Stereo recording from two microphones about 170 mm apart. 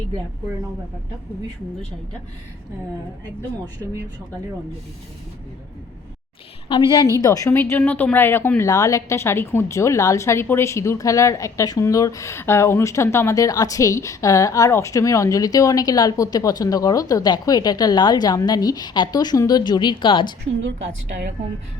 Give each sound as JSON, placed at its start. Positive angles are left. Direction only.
{"t": 6.7, "sound": "speech", "side_deg": 30}
{"t": 20.6, "sound": "a woman's voice", "side_deg": -90}